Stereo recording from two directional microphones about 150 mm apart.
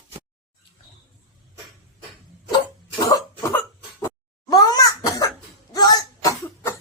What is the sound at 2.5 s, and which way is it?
Cough, 30° left (ahead or behind).